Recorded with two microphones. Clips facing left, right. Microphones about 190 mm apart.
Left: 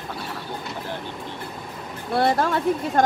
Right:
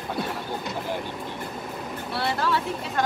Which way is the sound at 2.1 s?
50° left (ahead or behind).